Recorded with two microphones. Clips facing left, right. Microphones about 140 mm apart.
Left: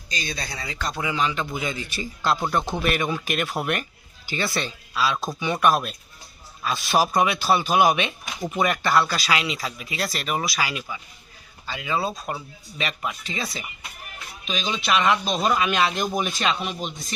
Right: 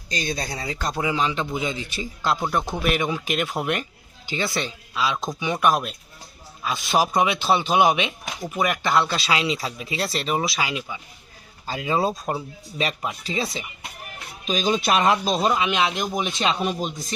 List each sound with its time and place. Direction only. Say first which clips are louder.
0.1 s a man's voice: right 4 dB; 50° right (ahead or behind); by 8.1 s 20° right (ahead or behind)
8.4 s speech: left 1 dB; 5° right (ahead or behind)
8.7 s speech: even; 20° right (ahead or behind)
11.6 s speech: right 4 dB; 35° right (ahead or behind)
14.4 s speech: right 5 dB; 45° right (ahead or behind)
15.4 s speech: even; 20° right (ahead or behind)
16.6 s speech: right 5 dB; 40° right (ahead or behind)